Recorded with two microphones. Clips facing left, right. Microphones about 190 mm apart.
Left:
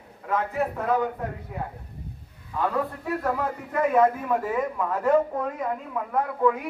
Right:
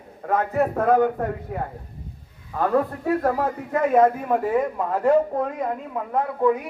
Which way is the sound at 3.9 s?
40° right (ahead or behind).